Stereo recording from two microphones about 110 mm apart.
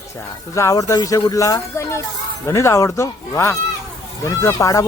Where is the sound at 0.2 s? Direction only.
25° left (ahead or behind).